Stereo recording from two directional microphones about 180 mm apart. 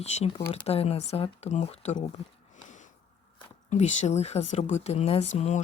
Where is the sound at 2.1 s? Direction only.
45° left (ahead or behind).